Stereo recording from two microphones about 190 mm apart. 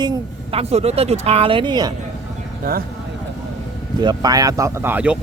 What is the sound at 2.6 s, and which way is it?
Speech, 50° right (ahead or behind).